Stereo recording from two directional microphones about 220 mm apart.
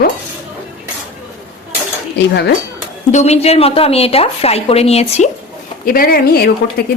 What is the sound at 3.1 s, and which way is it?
Speech, 30° left (ahead or behind).